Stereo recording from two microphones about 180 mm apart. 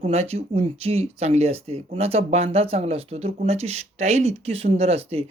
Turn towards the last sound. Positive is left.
turn(degrees=-35)  # may be behind; listen again after turning